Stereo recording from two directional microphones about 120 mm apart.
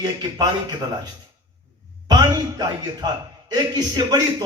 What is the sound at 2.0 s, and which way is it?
A man's voice, 35° right (ahead or behind).